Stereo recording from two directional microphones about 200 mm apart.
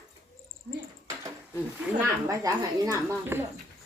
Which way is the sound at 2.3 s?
15° right (ahead or behind).